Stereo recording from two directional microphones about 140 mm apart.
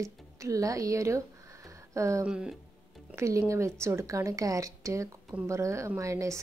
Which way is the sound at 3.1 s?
20° right (ahead or behind).